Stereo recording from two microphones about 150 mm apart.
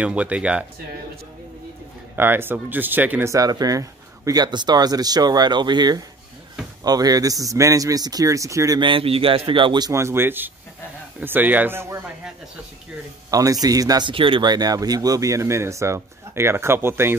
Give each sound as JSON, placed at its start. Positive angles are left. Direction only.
{"t": 0.0, "sound": "speech", "side_deg": -10}
{"t": 2.1, "sound": "speech", "side_deg": -15}
{"t": 13.3, "sound": "speech", "side_deg": -25}